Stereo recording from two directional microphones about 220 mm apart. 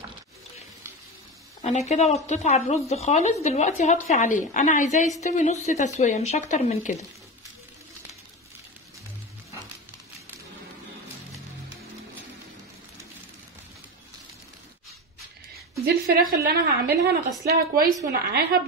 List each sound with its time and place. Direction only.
1.6 s a woman's voice: 30° left (ahead or behind)
15.8 s a woman's voice: 40° right (ahead or behind)